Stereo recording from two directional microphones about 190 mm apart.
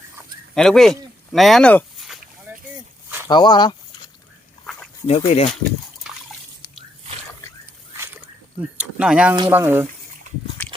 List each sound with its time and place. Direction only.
0.5 s speech: 5° left (ahead or behind)
2.5 s boat: 10° right (ahead or behind)
3.2 s speech: 25° left (ahead or behind)
4.6 s dog: centre (ahead or behind)
5.0 s speech: 35° left (ahead or behind)
8.8 s speech: 5° right (ahead or behind)
10.6 s biting: 10° left (ahead or behind)